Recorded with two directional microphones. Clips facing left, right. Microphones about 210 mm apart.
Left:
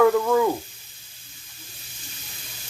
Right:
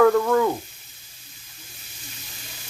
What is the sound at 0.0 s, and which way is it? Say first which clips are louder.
Sizzle: right 1 dB; 5° left (ahead or behind).